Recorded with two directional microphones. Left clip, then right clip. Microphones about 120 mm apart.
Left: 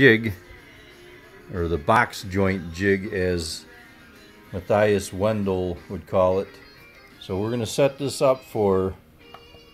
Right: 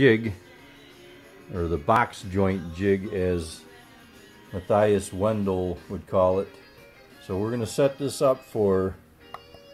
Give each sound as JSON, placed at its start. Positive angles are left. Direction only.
{"t": 0.0, "sound": "speech", "side_deg": 15}
{"t": 1.5, "sound": "speech", "side_deg": 20}
{"t": 2.3, "sound": "speech", "side_deg": 10}
{"t": 4.5, "sound": "speech", "side_deg": 25}